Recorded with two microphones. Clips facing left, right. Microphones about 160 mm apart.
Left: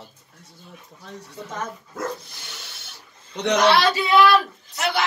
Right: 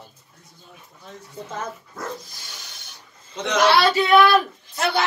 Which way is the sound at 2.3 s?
65° left (ahead or behind).